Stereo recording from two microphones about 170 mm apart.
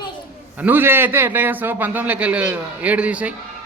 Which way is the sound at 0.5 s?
10° right (ahead or behind).